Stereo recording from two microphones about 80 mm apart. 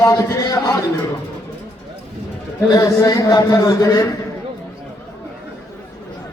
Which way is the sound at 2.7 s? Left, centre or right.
Left.